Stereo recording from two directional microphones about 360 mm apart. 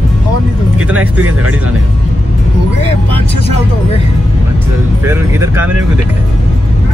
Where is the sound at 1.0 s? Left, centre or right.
Right.